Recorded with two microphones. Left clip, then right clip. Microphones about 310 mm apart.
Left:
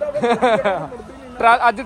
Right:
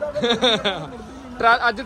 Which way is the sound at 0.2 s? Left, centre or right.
Centre.